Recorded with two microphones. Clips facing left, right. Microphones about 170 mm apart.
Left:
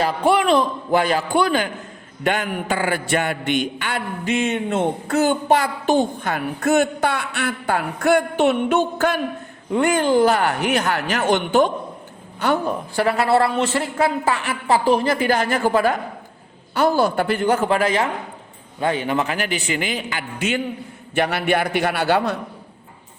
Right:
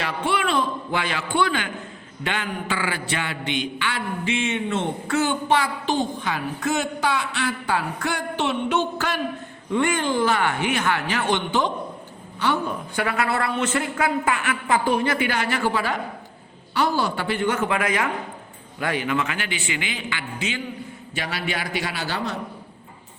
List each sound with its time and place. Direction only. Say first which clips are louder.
0.0 s a woman's voice: left 7 dB; 35° left (ahead or behind)
9.7 s a woman's voice: left 5 dB; 40° left (ahead or behind)
21.2 s a man's voice: left 9 dB; 55° left (ahead or behind)